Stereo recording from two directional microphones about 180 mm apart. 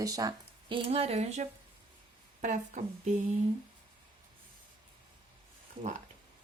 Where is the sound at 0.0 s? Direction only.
20° right (ahead or behind).